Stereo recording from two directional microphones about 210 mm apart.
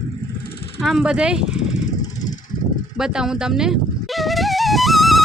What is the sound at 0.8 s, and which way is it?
Speech, centre (ahead or behind).